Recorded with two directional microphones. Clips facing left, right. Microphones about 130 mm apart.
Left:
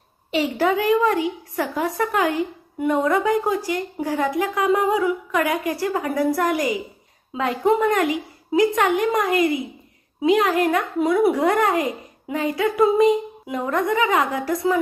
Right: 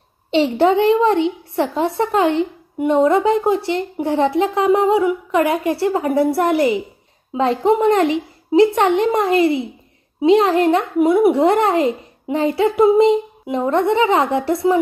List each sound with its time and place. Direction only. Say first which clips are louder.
0.3 s a woman's voice: right 6 dB; 30° right (ahead or behind)